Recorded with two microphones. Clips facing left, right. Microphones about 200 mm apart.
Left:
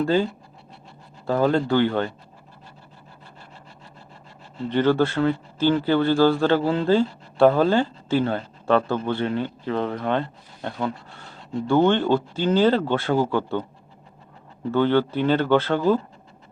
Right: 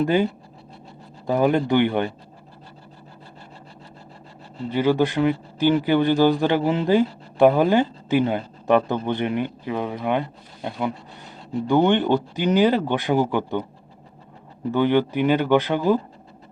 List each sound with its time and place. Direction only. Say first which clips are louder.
0.0 s speech: right 1 dB; 20° right (ahead or behind)
1.3 s speech: right 1 dB; 15° right (ahead or behind)
4.7 s speech: even; 10° right (ahead or behind)
14.7 s speech: even; 15° right (ahead or behind)